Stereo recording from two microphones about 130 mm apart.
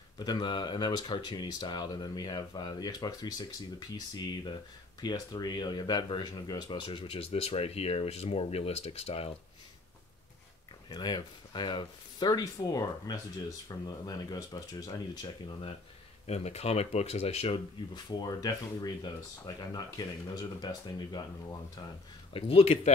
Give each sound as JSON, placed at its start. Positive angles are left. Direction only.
{"t": 0.2, "sound": "speech", "side_deg": 35}
{"t": 10.9, "sound": "speech", "side_deg": 30}
{"t": 16.3, "sound": "speech", "side_deg": 55}
{"t": 17.9, "sound": "speech", "side_deg": 30}
{"t": 22.3, "sound": "speech", "side_deg": 50}